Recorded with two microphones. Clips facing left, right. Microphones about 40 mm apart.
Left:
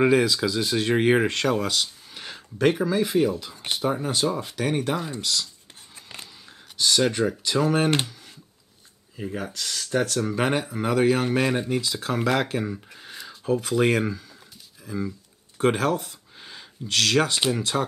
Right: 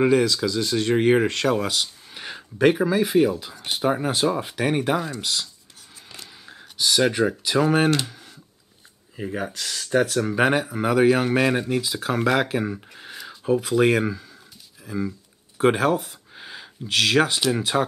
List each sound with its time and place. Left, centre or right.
0.0 s speech: centre
6.8 s speech: centre
9.1 s speech: centre
14.9 s a sound: centre
17.5 s speech: centre